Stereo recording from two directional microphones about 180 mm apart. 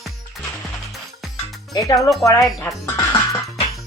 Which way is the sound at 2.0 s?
Centre (ahead or behind).